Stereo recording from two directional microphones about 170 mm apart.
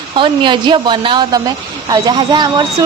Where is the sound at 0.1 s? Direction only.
30° right (ahead or behind).